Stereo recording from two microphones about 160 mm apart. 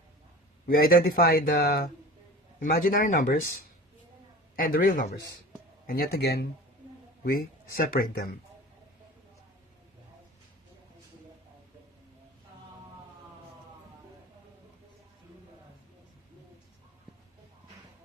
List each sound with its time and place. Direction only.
0.8 s speech: 65° left (ahead or behind)
5.9 s speech: 70° left (ahead or behind)